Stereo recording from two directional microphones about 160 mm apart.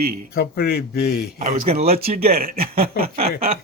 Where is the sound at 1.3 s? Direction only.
50° right (ahead or behind).